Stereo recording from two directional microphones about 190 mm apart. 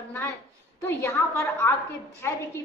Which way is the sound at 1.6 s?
10° left (ahead or behind).